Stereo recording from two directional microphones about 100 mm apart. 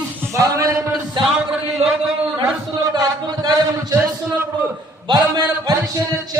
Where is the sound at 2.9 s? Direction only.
45° right (ahead or behind).